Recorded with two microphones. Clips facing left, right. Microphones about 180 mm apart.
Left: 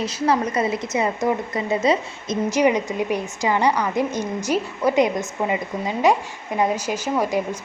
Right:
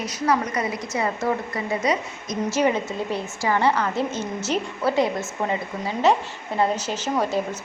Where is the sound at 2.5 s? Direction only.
15° left (ahead or behind).